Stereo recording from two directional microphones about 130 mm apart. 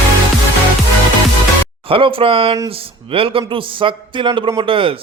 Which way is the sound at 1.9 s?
45° right (ahead or behind).